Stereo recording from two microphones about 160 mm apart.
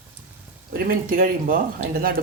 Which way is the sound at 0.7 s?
60° right (ahead or behind).